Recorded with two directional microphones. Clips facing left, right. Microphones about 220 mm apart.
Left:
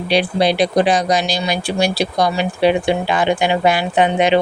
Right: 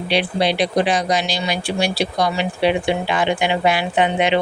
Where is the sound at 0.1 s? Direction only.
40° left (ahead or behind).